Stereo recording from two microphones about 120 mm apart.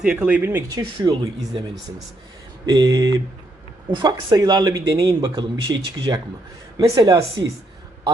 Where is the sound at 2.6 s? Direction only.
35° right (ahead or behind).